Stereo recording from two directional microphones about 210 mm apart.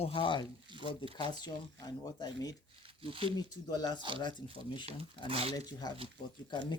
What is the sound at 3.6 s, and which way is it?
Speech, 20° left (ahead or behind).